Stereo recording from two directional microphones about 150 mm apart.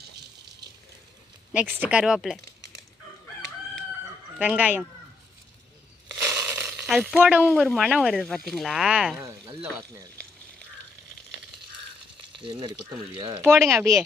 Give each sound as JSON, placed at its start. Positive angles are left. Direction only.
{"t": 1.8, "sound": "speech", "side_deg": -10}
{"t": 4.4, "sound": "speech", "side_deg": -10}
{"t": 6.2, "sound": "crushing", "side_deg": -15}
{"t": 6.8, "sound": "speech", "side_deg": -5}
{"t": 7.4, "sound": "speech", "side_deg": 5}
{"t": 9.2, "sound": "speech", "side_deg": -20}
{"t": 12.4, "sound": "speech", "side_deg": -35}
{"t": 13.7, "sound": "speech", "side_deg": -20}